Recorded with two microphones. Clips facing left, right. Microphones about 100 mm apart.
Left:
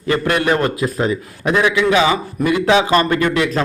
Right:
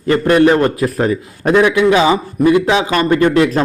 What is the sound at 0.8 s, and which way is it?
Speech, 45° right (ahead or behind).